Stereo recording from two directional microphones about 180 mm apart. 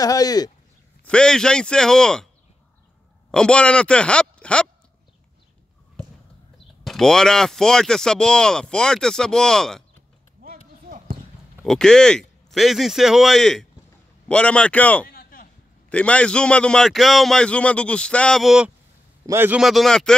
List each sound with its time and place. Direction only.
0.0 s speech: 20° left (ahead or behind)
1.0 s speech: 5° left (ahead or behind)
3.3 s speech: 5° left (ahead or behind)
6.8 s speech: centre (ahead or behind)
10.4 s run: 50° right (ahead or behind)
11.6 s a man's voice: 5° left (ahead or behind)
15.0 s a sound: 55° left (ahead or behind)
15.9 s speech: 5° left (ahead or behind)
19.2 s speech: 10° right (ahead or behind)